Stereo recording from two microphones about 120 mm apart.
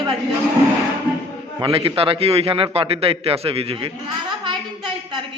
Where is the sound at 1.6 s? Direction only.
50° right (ahead or behind).